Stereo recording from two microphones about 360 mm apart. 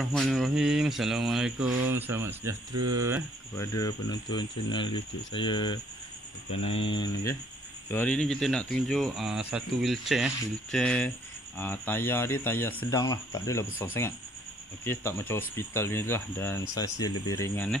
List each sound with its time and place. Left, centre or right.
0.0 s speech: centre
3.5 s speech: centre
14.9 s speech: centre